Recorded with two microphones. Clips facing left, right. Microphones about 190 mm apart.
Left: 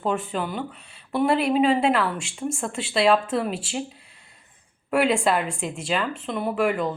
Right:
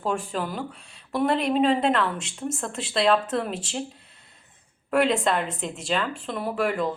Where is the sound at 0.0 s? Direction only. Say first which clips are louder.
Left 2 dB; 5° left (ahead or behind).